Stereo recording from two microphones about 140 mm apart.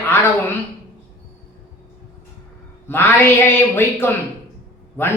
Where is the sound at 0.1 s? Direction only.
15° left (ahead or behind).